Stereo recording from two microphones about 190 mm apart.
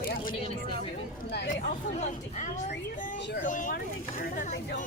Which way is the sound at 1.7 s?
40° left (ahead or behind).